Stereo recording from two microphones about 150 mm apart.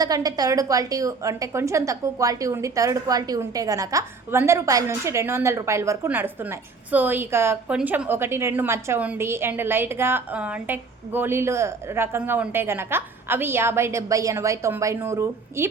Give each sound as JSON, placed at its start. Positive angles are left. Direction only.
{"t": 0.0, "sound": "a woman's voice", "side_deg": -25}